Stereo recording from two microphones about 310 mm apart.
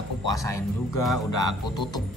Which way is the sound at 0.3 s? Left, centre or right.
Centre.